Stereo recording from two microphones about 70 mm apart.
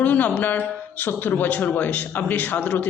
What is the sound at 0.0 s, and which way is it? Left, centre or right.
A man's voice, left.